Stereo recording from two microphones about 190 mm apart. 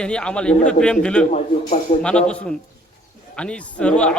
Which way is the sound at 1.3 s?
35° left (ahead or behind).